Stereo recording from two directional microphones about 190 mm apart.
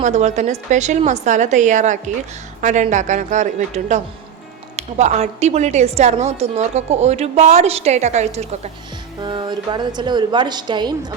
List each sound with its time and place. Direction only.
0.0 s a woman's voice: 40° right (ahead or behind)
9.2 s a woman's voice: 25° right (ahead or behind)